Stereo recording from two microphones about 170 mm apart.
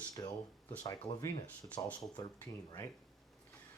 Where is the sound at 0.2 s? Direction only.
20° left (ahead or behind).